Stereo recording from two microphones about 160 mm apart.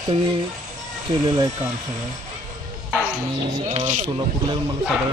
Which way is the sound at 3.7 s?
45° right (ahead or behind).